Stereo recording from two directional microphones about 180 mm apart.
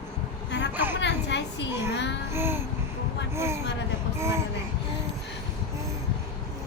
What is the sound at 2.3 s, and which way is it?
Babbling, 15° right (ahead or behind).